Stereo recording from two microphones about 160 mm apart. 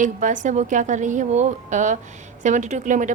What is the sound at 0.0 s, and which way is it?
Speech, 50° right (ahead or behind).